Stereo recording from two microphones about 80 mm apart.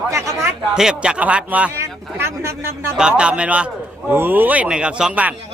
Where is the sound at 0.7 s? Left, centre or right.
Centre.